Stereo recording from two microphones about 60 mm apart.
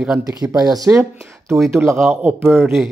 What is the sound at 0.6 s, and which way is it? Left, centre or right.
Speech, right.